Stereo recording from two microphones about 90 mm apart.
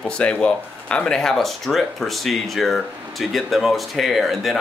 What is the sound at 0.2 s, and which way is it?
Speech, 15° left (ahead or behind).